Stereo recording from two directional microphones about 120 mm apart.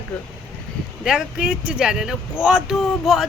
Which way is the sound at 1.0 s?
5° right (ahead or behind).